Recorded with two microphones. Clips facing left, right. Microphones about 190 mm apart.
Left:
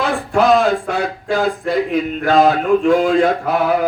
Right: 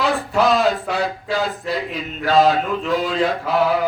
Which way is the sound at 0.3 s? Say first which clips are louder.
Left 5 dB; 50° left (ahead or behind).